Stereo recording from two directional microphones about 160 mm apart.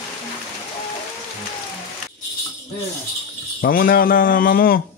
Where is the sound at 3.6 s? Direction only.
65° left (ahead or behind).